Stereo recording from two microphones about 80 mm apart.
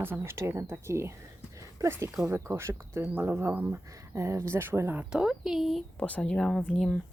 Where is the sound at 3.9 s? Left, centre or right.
Right.